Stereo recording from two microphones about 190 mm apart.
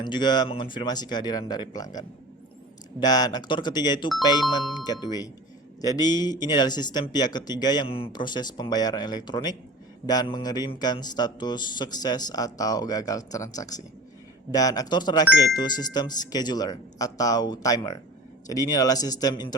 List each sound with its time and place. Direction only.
0.0 s a man's voice: 25° left (ahead or behind)